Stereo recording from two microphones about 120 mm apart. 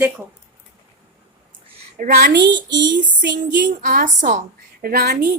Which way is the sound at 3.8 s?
90° right.